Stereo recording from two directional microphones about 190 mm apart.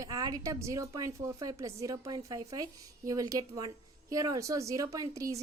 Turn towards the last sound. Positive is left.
turn(degrees=-15)  # may be behind; listen again after turning